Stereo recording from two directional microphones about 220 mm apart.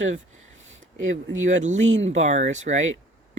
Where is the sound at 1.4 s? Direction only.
35° right (ahead or behind).